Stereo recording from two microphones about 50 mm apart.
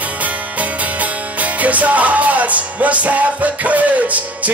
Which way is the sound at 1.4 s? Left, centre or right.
Right.